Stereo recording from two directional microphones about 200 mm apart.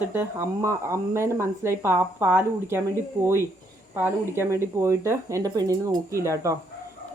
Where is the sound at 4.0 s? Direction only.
10° right (ahead or behind).